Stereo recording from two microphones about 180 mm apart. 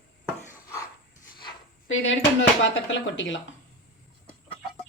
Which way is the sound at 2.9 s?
90° left.